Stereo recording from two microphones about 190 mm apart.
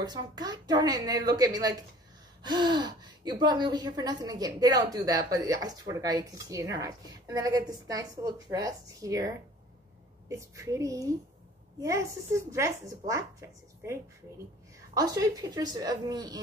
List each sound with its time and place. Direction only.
0.0 s a woman's voice: 20° right (ahead or behind)
15.0 s a woman's voice: 20° right (ahead or behind)